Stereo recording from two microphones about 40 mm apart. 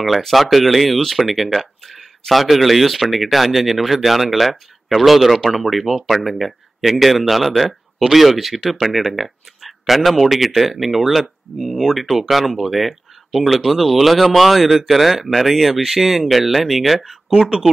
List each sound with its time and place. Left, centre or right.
0.0 s speech: centre
17.3 s speech: right